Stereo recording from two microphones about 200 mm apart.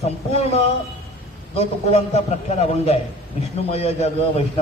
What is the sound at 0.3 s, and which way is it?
Speech, 30° left (ahead or behind).